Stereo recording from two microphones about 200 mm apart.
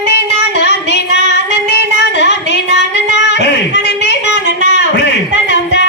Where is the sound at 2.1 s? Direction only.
60° left (ahead or behind).